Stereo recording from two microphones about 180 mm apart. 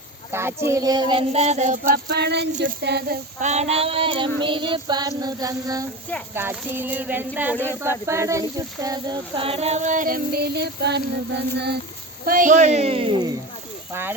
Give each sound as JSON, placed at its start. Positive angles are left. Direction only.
{"t": 0.3, "sound": "child singing", "side_deg": -15}
{"t": 1.3, "sound": "a sound", "side_deg": -35}
{"t": 2.8, "sound": "speech", "side_deg": -65}
{"t": 3.4, "sound": "child singing", "side_deg": -40}
{"t": 6.3, "sound": "speech", "side_deg": -10}
{"t": 7.5, "sound": "speech", "side_deg": 10}
{"t": 7.8, "sound": "a sound", "side_deg": -15}
{"t": 12.2, "sound": "a sound", "side_deg": -50}
{"t": 13.9, "sound": "speech", "side_deg": -10}